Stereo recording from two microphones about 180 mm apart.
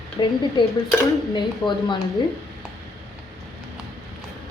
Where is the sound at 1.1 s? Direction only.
20° left (ahead or behind).